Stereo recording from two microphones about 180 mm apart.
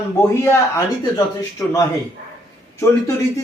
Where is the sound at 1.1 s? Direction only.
15° left (ahead or behind).